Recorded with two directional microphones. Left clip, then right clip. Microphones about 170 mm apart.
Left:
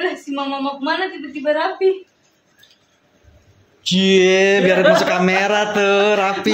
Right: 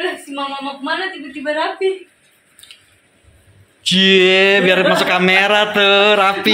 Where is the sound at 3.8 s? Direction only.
5° left (ahead or behind).